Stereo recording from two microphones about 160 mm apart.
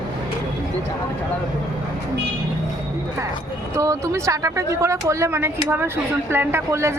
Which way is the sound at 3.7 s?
20° right (ahead or behind).